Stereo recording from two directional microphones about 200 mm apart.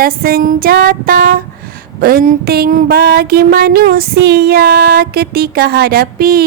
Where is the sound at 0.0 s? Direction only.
50° right (ahead or behind).